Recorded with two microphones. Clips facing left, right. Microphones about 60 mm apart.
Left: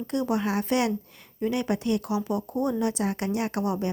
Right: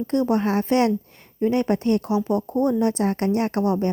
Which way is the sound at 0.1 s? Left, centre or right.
Right.